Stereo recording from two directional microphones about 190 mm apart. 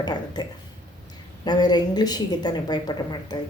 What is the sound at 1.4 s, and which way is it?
A woman's voice, 20° left (ahead or behind).